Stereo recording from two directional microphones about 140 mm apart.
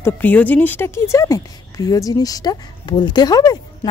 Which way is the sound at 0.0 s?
10° left (ahead or behind).